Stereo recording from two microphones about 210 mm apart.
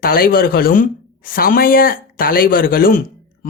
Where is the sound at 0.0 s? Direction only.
45° left (ahead or behind).